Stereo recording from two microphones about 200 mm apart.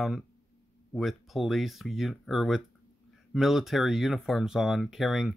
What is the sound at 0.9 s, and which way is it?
Speech, centre (ahead or behind).